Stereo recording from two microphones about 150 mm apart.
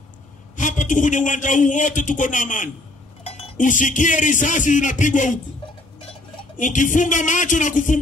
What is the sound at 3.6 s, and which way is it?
Speech, 60° left (ahead or behind).